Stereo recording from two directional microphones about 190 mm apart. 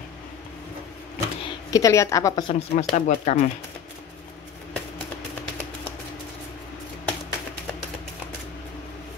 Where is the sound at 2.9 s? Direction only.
35° left (ahead or behind).